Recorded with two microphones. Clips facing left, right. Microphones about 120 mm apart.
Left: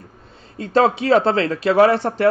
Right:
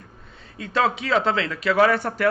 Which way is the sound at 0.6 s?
35° left (ahead or behind).